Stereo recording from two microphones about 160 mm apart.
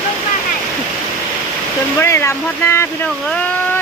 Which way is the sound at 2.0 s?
15° left (ahead or behind).